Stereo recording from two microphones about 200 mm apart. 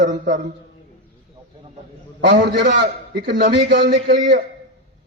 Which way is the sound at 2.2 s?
55° right (ahead or behind).